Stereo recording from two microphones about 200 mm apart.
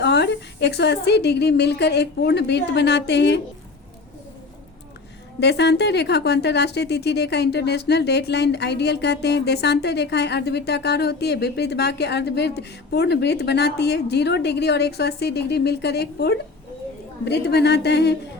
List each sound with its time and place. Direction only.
0.0 s a woman's voice: 55° left (ahead or behind)
5.4 s a woman's voice: 60° left (ahead or behind)